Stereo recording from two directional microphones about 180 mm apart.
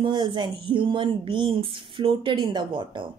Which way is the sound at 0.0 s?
25° right (ahead or behind).